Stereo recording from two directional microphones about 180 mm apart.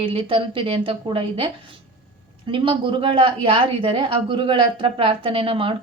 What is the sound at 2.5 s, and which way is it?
A woman's voice, 30° right (ahead or behind).